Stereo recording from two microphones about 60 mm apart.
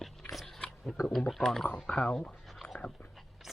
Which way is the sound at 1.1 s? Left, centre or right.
Centre.